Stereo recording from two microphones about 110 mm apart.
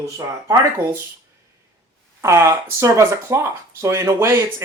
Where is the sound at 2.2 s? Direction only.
25° right (ahead or behind).